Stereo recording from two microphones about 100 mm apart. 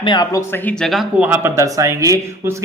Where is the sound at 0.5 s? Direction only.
15° left (ahead or behind).